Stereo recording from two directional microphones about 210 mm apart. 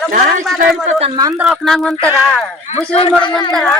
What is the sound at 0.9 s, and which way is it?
Speech, 30° right (ahead or behind).